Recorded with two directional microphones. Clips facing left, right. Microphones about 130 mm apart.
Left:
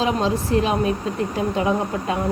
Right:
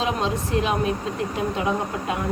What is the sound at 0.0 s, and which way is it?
Speech, 35° left (ahead or behind).